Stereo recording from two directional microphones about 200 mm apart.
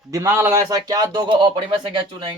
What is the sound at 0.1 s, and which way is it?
Speech, 15° right (ahead or behind).